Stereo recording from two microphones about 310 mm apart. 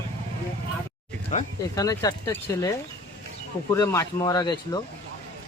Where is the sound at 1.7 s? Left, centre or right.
Centre.